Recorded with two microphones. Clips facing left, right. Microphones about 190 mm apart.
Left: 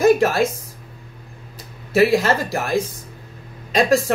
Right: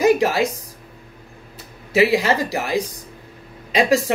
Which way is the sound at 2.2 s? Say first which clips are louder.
Even; 10° right (ahead or behind).